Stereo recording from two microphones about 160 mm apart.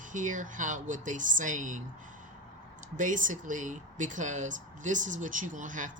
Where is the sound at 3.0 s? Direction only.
55° right (ahead or behind).